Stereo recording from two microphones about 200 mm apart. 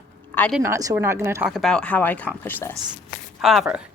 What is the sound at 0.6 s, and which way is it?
Speech, 15° right (ahead or behind).